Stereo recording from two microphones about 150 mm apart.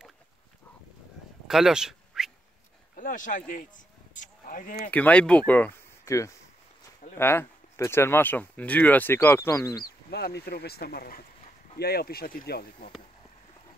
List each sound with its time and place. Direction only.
1.5 s a sound: 5° right (ahead or behind)
3.0 s speech: 60° left (ahead or behind)
4.9 s speech: 10° left (ahead or behind)
10.1 s speech: 90° left